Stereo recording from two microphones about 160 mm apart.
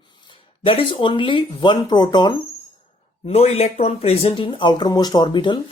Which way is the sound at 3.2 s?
40° left (ahead or behind).